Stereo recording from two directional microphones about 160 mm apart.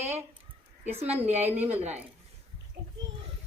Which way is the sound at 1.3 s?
40° right (ahead or behind).